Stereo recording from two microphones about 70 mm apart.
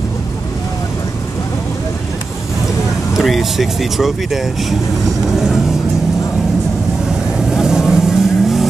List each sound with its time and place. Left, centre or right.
3.2 s speech: centre
7.3 s vehicle: centre